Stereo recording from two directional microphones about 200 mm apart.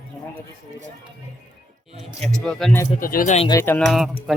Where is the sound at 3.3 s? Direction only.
25° left (ahead or behind).